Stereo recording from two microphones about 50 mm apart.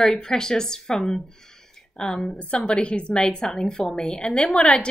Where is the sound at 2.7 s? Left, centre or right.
Left.